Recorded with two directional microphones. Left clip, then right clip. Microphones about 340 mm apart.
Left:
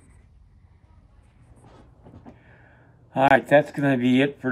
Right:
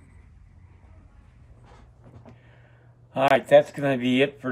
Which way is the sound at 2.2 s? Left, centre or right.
Centre.